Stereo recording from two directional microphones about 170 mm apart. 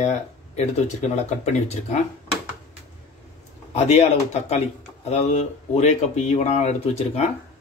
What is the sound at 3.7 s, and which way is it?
Speech, 40° left (ahead or behind).